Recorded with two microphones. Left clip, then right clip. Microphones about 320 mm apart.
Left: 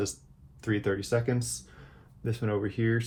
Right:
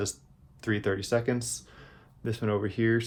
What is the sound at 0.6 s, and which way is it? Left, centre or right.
Speech, right.